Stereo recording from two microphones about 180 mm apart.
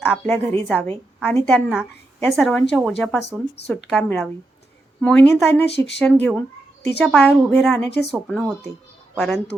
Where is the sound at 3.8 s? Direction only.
Centre (ahead or behind).